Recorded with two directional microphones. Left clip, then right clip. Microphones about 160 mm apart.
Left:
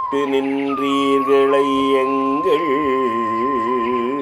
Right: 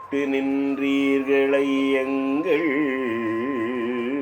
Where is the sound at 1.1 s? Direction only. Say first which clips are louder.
Left 6 dB; 35° left (ahead or behind).